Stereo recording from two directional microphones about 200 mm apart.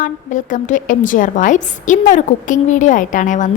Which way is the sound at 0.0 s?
40° left (ahead or behind).